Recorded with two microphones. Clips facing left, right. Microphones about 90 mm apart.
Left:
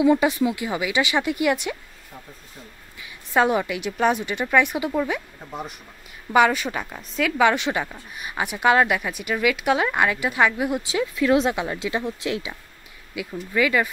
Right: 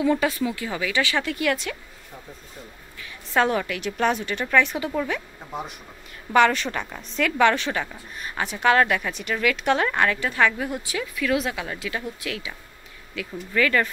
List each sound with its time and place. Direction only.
0.0 s a woman's voice: 15° left (ahead or behind)
3.0 s a sound: 15° left (ahead or behind)
3.9 s a woman's voice: 10° left (ahead or behind)
6.3 s a woman's voice: 10° left (ahead or behind)
13.1 s a woman's voice: 10° left (ahead or behind)